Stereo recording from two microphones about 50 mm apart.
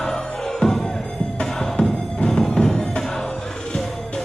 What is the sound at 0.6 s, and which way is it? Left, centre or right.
Music, centre.